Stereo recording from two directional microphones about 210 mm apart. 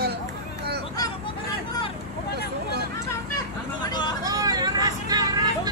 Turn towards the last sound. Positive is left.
turn(degrees=-20)  # may be behind; listen again after turning